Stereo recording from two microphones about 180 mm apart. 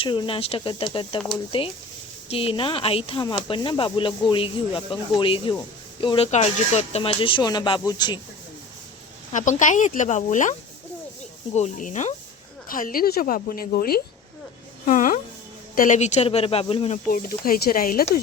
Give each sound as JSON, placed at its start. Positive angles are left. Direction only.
{"t": 0.0, "sound": "speech", "side_deg": 25}
{"t": 9.3, "sound": "speech", "side_deg": 45}
{"t": 11.5, "sound": "speech", "side_deg": 40}
{"t": 14.8, "sound": "music", "side_deg": 50}
{"t": 15.7, "sound": "speech", "side_deg": 45}
{"t": 17.1, "sound": "speech", "side_deg": 50}